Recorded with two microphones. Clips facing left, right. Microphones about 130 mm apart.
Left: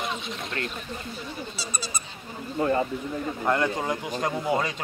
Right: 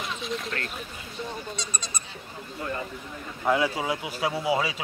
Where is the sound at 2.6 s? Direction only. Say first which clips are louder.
Left 9 dB; 40° left (ahead or behind).